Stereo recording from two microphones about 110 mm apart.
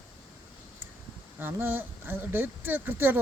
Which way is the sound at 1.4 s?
20° right (ahead or behind).